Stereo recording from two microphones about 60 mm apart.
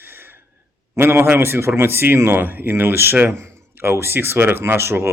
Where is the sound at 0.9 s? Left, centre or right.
Right.